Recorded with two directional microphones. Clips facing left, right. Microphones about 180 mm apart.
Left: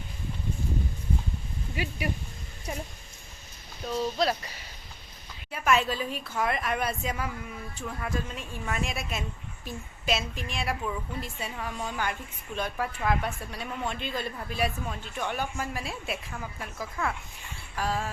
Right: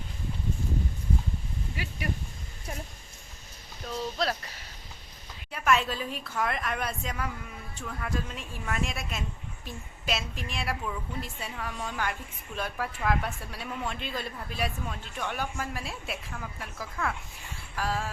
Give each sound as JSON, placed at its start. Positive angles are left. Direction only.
{"t": 1.7, "sound": "speech", "side_deg": 15}
{"t": 3.8, "sound": "a woman's voice", "side_deg": 0}